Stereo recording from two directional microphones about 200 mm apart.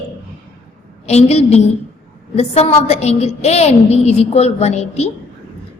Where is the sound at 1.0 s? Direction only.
30° left (ahead or behind).